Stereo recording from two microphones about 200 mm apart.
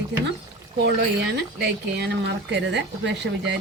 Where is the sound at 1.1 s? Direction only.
60° right (ahead or behind).